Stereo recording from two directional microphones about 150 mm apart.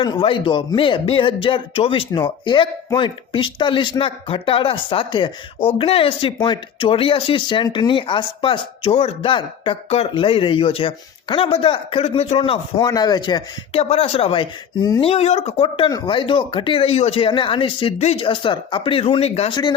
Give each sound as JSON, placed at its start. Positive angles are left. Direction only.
{"t": 0.0, "sound": "speech", "side_deg": 35}
{"t": 13.9, "sound": "speech", "side_deg": 40}
{"t": 15.0, "sound": "speech", "side_deg": 40}